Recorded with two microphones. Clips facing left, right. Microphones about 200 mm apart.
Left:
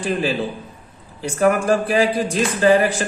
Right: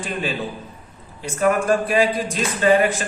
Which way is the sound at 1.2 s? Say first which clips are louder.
Left 2 dB; 35° left (ahead or behind).